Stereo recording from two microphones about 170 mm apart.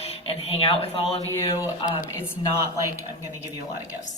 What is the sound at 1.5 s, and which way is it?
Speech, 20° left (ahead or behind).